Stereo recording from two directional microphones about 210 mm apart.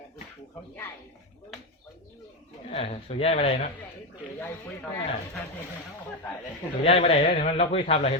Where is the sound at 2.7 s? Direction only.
30° left (ahead or behind).